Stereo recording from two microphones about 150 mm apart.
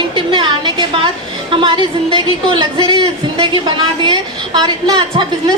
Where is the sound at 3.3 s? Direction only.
35° right (ahead or behind).